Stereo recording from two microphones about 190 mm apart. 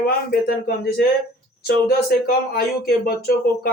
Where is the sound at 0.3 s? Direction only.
55° left (ahead or behind).